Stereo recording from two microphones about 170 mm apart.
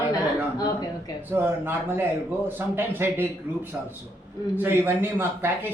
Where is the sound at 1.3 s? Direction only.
15° right (ahead or behind).